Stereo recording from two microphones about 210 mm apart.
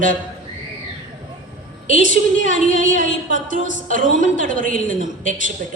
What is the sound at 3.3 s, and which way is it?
A woman's voice, 40° right (ahead or behind).